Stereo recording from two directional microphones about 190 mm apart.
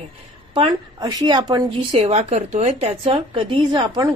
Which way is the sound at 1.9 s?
35° right (ahead or behind).